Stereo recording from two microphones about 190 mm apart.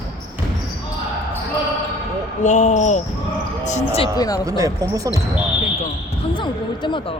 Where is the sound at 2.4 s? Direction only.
40° left (ahead or behind).